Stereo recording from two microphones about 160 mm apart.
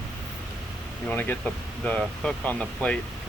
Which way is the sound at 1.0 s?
10° left (ahead or behind).